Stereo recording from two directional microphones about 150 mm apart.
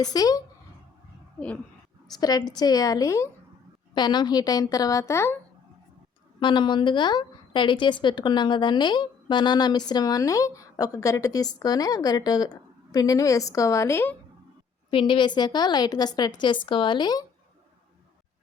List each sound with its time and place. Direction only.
0.0 s a woman's voice: 25° left (ahead or behind)
2.2 s a woman's voice: 25° left (ahead or behind)
6.4 s a woman's voice: 30° left (ahead or behind); by 14.2 s 15° left (ahead or behind)
14.8 s a woman's voice: 35° left (ahead or behind)